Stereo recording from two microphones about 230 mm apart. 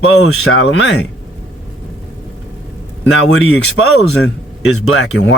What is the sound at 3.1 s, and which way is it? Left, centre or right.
Speech, left.